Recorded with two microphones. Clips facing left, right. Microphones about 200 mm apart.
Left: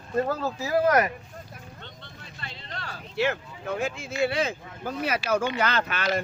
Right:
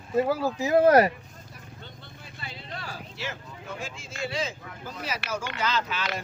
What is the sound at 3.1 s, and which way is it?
Speech, 60° left (ahead or behind).